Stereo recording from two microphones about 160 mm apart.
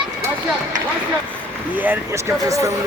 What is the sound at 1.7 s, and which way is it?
Speech, 10° right (ahead or behind).